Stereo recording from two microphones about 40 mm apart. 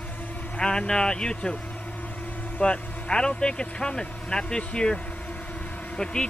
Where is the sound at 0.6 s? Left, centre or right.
Centre.